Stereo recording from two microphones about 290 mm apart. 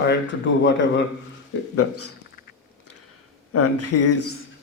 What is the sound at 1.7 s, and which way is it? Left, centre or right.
Speech, left.